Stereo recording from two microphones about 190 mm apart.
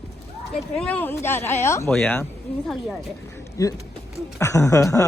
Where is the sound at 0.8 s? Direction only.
10° left (ahead or behind).